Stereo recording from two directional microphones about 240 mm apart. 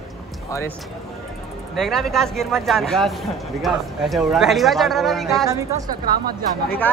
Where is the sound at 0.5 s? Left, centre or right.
Centre.